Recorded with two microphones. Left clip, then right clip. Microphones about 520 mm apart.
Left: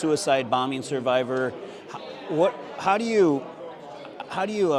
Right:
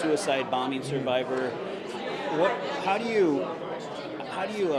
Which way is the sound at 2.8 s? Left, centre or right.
Left.